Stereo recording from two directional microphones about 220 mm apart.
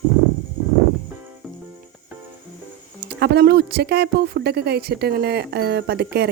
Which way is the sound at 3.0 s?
45° right (ahead or behind).